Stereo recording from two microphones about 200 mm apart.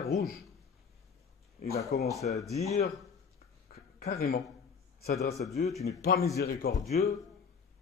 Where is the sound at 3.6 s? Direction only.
50° left (ahead or behind).